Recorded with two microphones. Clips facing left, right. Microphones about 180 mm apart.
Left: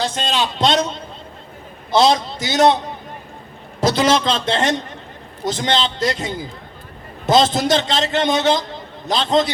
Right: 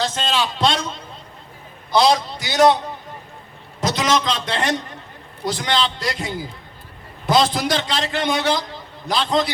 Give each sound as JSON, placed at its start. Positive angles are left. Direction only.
{"t": 0.0, "sound": "a man's voice", "side_deg": 15}
{"t": 1.9, "sound": "a man's voice", "side_deg": 25}
{"t": 3.8, "sound": "a man's voice", "side_deg": 30}